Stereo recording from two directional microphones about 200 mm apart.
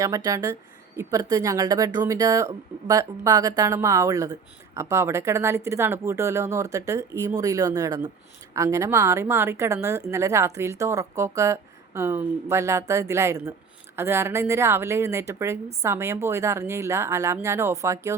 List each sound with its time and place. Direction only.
0.0 s speech: 15° right (ahead or behind)